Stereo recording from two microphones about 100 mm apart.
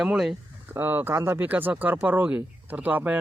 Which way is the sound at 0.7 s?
20° right (ahead or behind).